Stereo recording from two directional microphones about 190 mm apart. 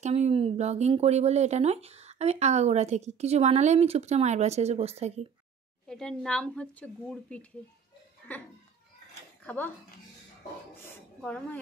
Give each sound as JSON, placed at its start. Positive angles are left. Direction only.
{"t": 0.0, "sound": "speech", "side_deg": -35}
{"t": 5.9, "sound": "a woman's voice", "side_deg": 5}
{"t": 11.1, "sound": "a woman's voice", "side_deg": 5}